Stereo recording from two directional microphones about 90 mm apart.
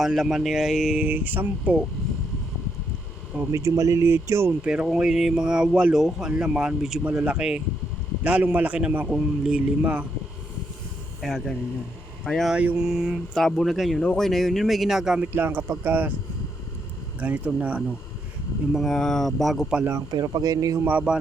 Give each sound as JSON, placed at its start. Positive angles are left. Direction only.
{"t": 0.0, "sound": "speech", "side_deg": -5}
{"t": 0.9, "sound": "speech", "side_deg": -20}
{"t": 3.5, "sound": "speech", "side_deg": -35}
{"t": 4.6, "sound": "speech", "side_deg": -10}
{"t": 11.2, "sound": "speech", "side_deg": 5}
{"t": 12.5, "sound": "speech", "side_deg": -10}
{"t": 15.3, "sound": "speech", "side_deg": -25}
{"t": 17.2, "sound": "speech", "side_deg": -15}
{"t": 18.7, "sound": "speech", "side_deg": 0}
{"t": 20.1, "sound": "speech", "side_deg": -50}
{"t": 20.8, "sound": "speech", "side_deg": -15}